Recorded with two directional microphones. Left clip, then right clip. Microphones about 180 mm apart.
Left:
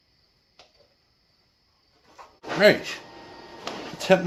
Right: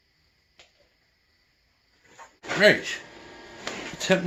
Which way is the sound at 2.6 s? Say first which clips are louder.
Left 1 dB; 10° left (ahead or behind).